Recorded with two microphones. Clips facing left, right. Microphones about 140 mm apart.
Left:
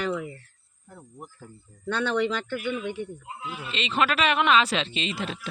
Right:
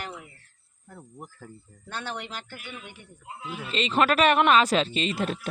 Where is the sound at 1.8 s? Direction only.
80° left.